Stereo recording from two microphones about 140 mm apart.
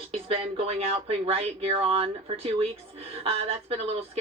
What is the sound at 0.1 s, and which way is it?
Speech, 45° right (ahead or behind).